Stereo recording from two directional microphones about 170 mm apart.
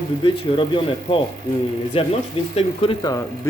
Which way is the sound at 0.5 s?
30° left (ahead or behind).